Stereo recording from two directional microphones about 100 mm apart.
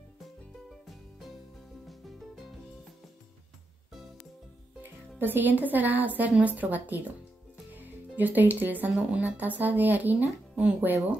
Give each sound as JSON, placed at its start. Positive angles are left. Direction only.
{"t": 1.9, "sound": "music", "side_deg": 0}
{"t": 5.2, "sound": "a woman's voice", "side_deg": -20}
{"t": 8.2, "sound": "a woman's voice", "side_deg": -15}